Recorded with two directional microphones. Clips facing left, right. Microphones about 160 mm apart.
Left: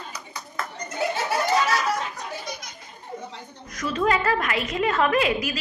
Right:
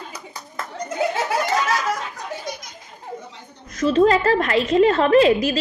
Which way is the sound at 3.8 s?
30° right (ahead or behind).